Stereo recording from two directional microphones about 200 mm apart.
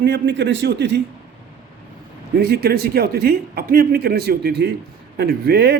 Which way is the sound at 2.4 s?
50° right (ahead or behind).